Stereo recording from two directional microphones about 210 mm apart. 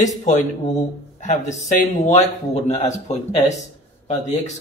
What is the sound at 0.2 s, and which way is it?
Speech, 35° left (ahead or behind).